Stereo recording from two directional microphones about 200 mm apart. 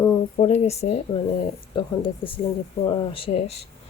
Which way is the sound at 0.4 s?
35° left (ahead or behind).